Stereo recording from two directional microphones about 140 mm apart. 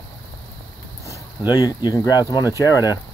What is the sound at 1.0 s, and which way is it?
Speech, 25° left (ahead or behind).